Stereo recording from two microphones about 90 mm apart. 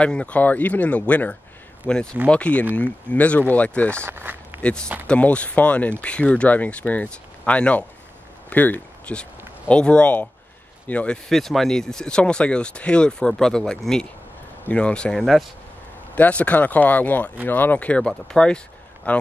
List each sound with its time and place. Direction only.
0.0 s speech: 15° left (ahead or behind)
4.0 s speech: 25° right (ahead or behind)
4.6 s speech: 15° left (ahead or behind)
11.2 s speech: 5° left (ahead or behind)
16.2 s speech: 15° left (ahead or behind)